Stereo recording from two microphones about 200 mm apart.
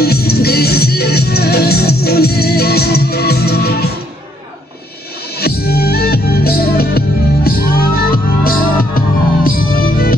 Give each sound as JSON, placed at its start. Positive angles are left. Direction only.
{"t": 0.0, "sound": "music", "side_deg": 50}
{"t": 5.4, "sound": "music", "side_deg": 50}